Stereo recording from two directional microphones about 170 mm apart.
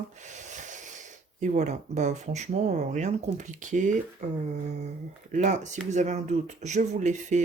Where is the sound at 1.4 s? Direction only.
45° right (ahead or behind).